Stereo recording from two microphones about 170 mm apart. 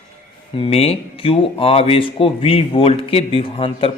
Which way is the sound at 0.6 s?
35° left (ahead or behind).